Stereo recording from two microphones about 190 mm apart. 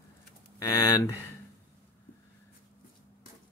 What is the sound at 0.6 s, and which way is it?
Speech, 15° left (ahead or behind).